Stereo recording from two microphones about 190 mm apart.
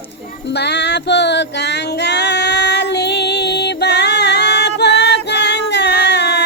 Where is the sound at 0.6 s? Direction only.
65° left (ahead or behind).